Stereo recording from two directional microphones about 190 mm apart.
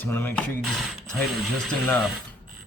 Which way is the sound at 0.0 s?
10° left (ahead or behind).